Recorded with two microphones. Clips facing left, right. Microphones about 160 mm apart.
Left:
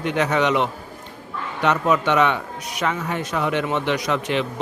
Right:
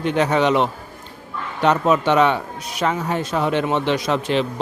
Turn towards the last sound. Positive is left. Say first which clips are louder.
# right 2 dB
turn(degrees=-30)  # may be behind; listen again after turning